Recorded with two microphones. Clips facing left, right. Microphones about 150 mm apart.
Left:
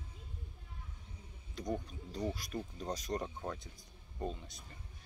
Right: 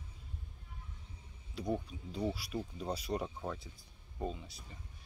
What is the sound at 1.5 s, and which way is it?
Speech, 5° right (ahead or behind).